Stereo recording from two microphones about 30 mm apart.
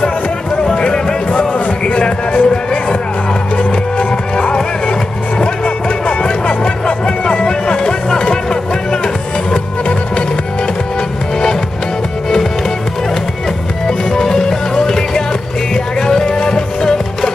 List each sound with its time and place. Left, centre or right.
0.7 s music: left
1.9 s speech: left
6.0 s music: left
13.8 s music: centre